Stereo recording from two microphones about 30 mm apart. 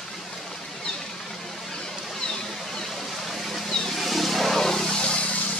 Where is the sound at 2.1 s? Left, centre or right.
Left.